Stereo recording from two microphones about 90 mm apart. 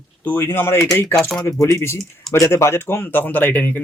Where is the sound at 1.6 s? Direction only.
35° left (ahead or behind).